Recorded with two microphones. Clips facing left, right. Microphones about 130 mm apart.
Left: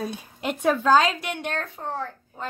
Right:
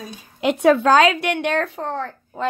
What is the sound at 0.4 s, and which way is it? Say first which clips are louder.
A woman's voice: right 8 dB; 90° right.